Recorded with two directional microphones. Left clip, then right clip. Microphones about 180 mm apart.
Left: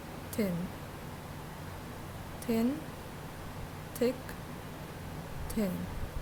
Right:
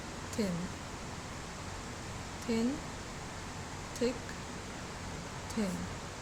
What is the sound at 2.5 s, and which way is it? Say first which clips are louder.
Speech: left 2 dB; 35° left (ahead or behind).